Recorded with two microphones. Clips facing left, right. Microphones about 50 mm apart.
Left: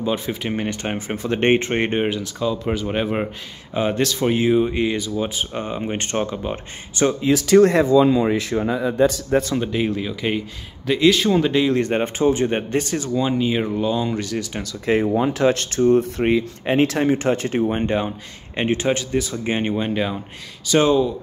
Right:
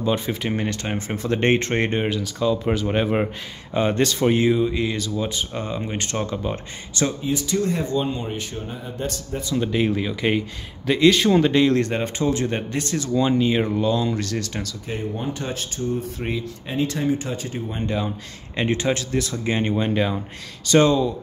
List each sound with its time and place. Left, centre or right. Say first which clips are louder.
0.0 s speech: even; centre
2.2 s speech: right 1 dB; centre
4.6 s speech: left 3 dB; left
4.8 s speech: left 3 dB; centre
6.3 s speech: even; centre
7.2 s speech: left 10 dB; left
8.3 s speech: left 10 dB; left
9.7 s speech: right 1 dB; centre
11.9 s speech: left 4 dB; left
13.1 s speech: right 1 dB; centre
14.9 s speech: left 11 dB; left
17.8 s speech: left 4 dB; left
18.6 s speech: left 2 dB; centre
19.7 s speech: even; centre